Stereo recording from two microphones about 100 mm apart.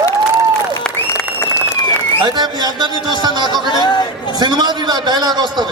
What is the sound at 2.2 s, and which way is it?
A man's voice, 45° right (ahead or behind).